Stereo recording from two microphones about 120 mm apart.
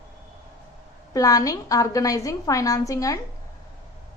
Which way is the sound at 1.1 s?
30° left (ahead or behind).